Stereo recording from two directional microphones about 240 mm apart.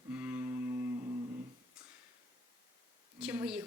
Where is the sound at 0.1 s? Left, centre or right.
Centre.